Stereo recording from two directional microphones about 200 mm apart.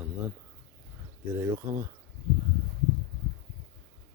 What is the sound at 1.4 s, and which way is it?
Speech, 15° right (ahead or behind).